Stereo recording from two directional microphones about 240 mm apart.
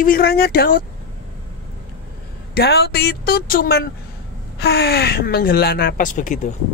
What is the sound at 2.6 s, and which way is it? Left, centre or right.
Speech, left.